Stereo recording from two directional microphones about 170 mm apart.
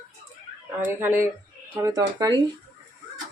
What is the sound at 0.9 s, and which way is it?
Speech, 15° right (ahead or behind).